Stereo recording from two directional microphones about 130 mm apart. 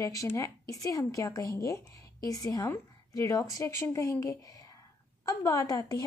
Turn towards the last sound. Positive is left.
turn(degrees=25)  # may be behind; listen again after turning